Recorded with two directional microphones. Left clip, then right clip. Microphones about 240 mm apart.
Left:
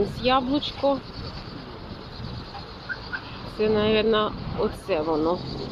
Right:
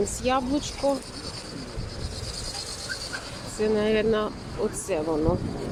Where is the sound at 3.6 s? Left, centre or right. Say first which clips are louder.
Left 2 dB; centre.